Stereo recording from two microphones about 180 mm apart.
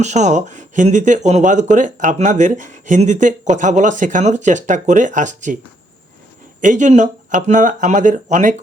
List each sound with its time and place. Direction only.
0.0 s speech: 40° right (ahead or behind)
6.6 s speech: 45° right (ahead or behind)